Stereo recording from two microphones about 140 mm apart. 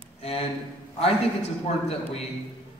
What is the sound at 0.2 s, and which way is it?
Speech, 45° left (ahead or behind).